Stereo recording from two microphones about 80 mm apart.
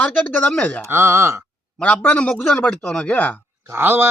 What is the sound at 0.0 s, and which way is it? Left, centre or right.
Speech, centre.